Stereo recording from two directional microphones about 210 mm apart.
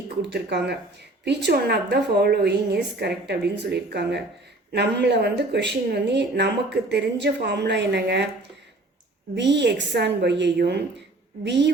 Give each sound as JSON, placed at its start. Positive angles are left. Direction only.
{"t": 0.2, "sound": "speech", "side_deg": -55}
{"t": 9.3, "sound": "a woman's voice", "side_deg": -55}